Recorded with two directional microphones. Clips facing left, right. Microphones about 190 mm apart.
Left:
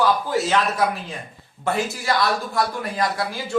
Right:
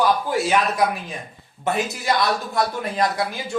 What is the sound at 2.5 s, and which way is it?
Speech, 20° right (ahead or behind).